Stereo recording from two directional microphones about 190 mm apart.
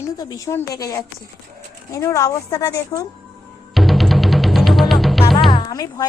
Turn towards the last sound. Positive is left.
turn(degrees=20)  # may be behind; listen again after turning